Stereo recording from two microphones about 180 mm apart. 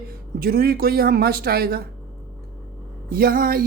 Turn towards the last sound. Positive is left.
turn(degrees=-55)  # may be behind; listen again after turning